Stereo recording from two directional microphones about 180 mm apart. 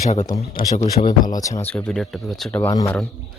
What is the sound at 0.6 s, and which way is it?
Speech, 50° left (ahead or behind).